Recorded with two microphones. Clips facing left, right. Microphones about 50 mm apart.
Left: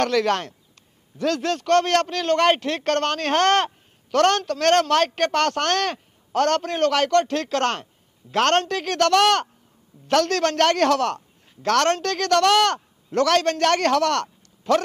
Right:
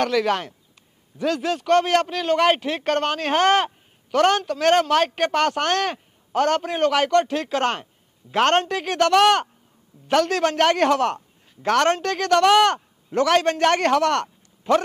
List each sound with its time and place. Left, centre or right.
0.0 s a man's voice: centre